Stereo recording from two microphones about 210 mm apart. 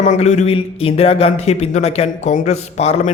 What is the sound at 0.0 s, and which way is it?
Speech, 35° left (ahead or behind).